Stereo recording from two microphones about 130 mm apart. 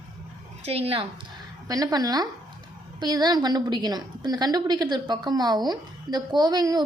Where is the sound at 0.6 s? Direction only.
50° right (ahead or behind).